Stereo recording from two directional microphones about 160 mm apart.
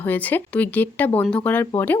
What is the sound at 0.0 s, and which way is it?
Speech, 10° left (ahead or behind).